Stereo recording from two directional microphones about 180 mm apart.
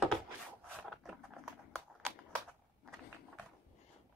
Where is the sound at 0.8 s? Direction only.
Centre (ahead or behind).